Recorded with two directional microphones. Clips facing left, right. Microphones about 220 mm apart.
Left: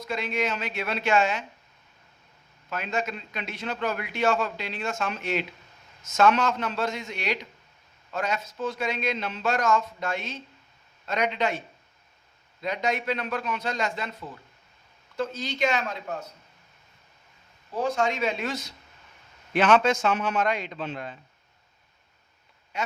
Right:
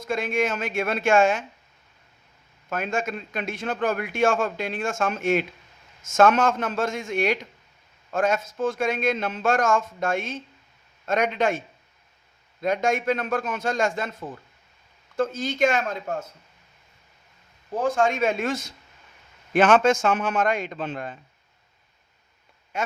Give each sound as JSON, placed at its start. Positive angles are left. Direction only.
{"t": 0.0, "sound": "a man's voice", "side_deg": -50}
{"t": 2.6, "sound": "a man's voice", "side_deg": -50}
{"t": 12.6, "sound": "a man's voice", "side_deg": -50}
{"t": 17.8, "sound": "a man's voice", "side_deg": -50}
{"t": 22.7, "sound": "speech", "side_deg": -50}